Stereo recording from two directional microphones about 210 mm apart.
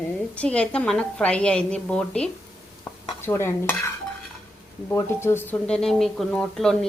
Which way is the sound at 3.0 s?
10° left (ahead or behind).